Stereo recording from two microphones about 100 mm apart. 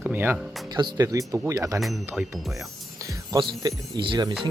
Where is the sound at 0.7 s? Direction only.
45° right (ahead or behind).